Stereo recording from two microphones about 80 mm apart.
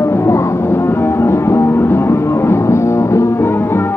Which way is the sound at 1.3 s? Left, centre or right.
Left.